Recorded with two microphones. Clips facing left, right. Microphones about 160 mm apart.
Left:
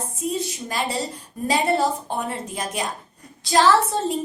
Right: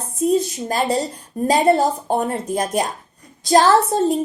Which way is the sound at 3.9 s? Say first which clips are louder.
Right 7 dB; 45° right (ahead or behind).